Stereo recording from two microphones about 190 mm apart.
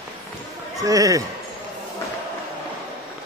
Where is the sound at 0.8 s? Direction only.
20° right (ahead or behind).